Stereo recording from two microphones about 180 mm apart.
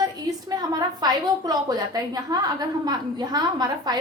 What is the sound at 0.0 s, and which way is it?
A woman's voice, 20° right (ahead or behind).